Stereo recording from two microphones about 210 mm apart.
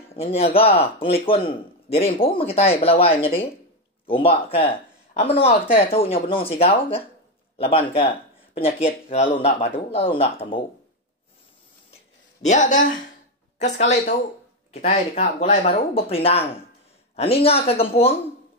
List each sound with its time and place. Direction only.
0.1 s speech: 30° left (ahead or behind)
12.4 s speech: 35° left (ahead or behind)